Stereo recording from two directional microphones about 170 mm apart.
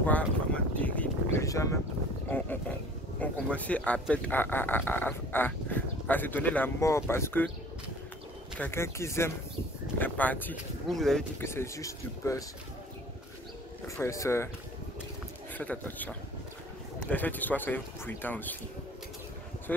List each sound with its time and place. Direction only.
0.7 s a sound: 10° left (ahead or behind)
2.2 s speech: 10° left (ahead or behind)
8.5 s speech: 15° left (ahead or behind)
11.4 s speech: 15° left (ahead or behind)
13.8 s speech: 15° left (ahead or behind)
15.5 s speech: 10° left (ahead or behind)